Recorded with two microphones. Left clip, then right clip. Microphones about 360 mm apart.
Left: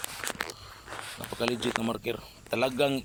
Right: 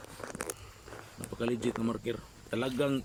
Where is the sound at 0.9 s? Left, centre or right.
Left.